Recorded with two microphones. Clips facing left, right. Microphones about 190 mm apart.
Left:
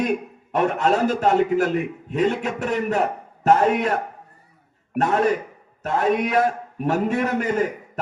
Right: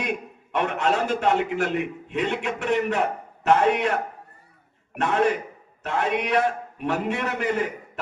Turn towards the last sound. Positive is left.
turn(degrees=45)  # may be behind; listen again after turning